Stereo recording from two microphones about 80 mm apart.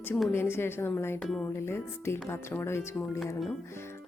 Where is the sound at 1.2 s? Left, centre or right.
Centre.